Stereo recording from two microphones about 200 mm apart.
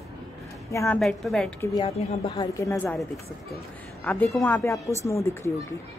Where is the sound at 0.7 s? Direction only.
15° left (ahead or behind).